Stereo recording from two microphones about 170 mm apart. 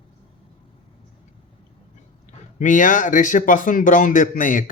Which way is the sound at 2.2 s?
50° left (ahead or behind).